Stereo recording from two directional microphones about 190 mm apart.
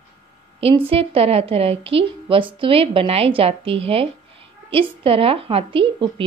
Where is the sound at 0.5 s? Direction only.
30° right (ahead or behind).